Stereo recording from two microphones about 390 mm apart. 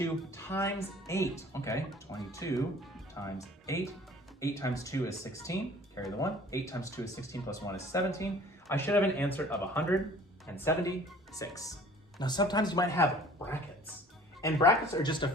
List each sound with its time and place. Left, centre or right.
0.0 s speech: centre